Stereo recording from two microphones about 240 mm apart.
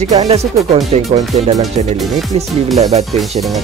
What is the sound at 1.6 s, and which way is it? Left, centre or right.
Speech, centre.